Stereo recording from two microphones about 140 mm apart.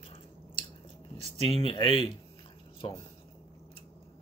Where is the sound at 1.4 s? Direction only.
40° left (ahead or behind).